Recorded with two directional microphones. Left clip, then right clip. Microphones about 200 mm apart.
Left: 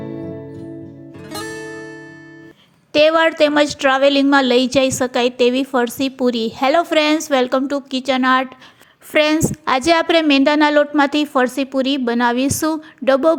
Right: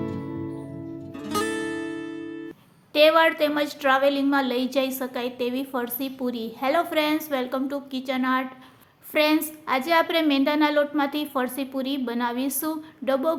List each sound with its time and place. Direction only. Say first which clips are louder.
2.9 s a woman's voice: left 4 dB; 30° left (ahead or behind)